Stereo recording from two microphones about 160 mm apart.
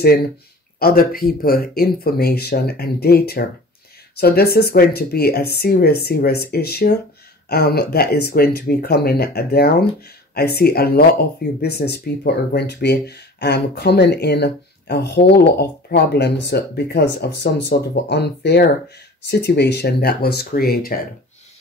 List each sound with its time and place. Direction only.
0.7 s speech: 70° left (ahead or behind)